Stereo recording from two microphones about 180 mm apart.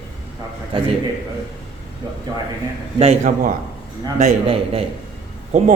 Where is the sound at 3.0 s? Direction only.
40° right (ahead or behind).